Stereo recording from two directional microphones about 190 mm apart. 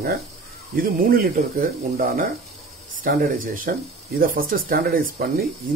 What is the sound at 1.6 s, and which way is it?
Speech, 50° right (ahead or behind).